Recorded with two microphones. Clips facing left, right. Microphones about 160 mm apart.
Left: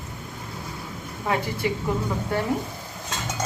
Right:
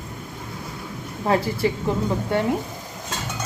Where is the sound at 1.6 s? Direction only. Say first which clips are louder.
Right 2 dB; 30° right (ahead or behind).